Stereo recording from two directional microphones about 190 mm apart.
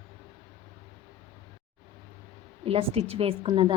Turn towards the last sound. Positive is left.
turn(degrees=-25)  # may be behind; listen again after turning